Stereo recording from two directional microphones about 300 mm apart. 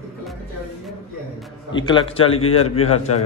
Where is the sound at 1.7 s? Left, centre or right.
Centre.